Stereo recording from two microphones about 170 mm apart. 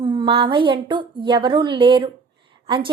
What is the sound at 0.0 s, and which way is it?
A woman's voice, 30° right (ahead or behind).